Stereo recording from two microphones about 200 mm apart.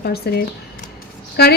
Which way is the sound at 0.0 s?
50° left (ahead or behind).